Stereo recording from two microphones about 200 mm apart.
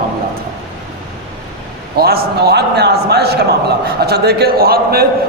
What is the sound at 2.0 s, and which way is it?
A man's voice, 50° right (ahead or behind).